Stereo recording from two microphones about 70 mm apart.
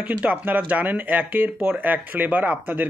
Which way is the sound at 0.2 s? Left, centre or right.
Centre.